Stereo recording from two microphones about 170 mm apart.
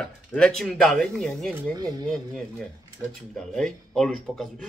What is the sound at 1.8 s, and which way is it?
Speech, 25° right (ahead or behind).